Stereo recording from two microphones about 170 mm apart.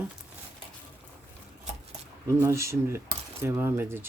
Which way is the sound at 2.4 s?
15° right (ahead or behind).